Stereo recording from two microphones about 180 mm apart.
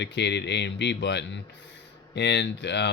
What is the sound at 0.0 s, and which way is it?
Speech, 75° left (ahead or behind).